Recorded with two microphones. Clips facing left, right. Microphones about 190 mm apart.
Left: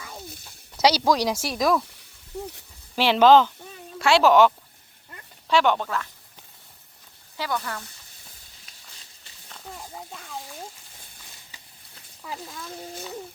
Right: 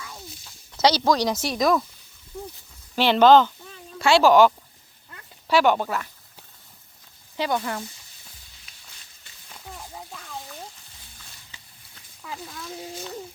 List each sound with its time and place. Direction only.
0.8 s speech: 10° left (ahead or behind)
2.9 s speech: centre (ahead or behind)
7.3 s speech: 20° right (ahead or behind)
9.7 s a sound: 5° left (ahead or behind)
12.5 s speech: 5° right (ahead or behind)